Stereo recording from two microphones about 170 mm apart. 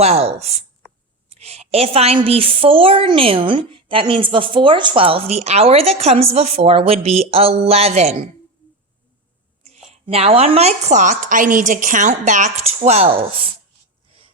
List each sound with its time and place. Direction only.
0.0 s a woman's voice: 35° right (ahead or behind)
10.1 s a woman's voice: 35° right (ahead or behind)